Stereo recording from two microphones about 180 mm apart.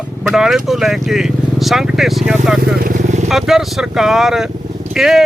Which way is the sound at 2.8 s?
45° right (ahead or behind).